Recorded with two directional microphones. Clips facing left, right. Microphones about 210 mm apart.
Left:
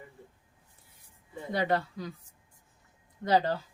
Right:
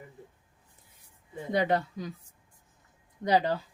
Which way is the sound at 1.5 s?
20° right (ahead or behind).